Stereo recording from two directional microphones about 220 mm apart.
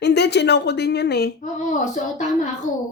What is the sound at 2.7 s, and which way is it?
Speech, 35° left (ahead or behind).